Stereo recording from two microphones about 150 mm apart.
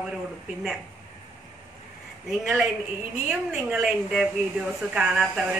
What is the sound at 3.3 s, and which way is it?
A woman's voice, 5° right (ahead or behind).